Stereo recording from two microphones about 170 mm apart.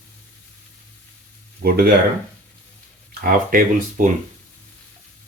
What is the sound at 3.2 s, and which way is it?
Speech, 55° right (ahead or behind).